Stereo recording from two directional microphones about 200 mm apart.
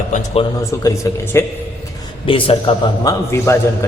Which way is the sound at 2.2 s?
25° left (ahead or behind).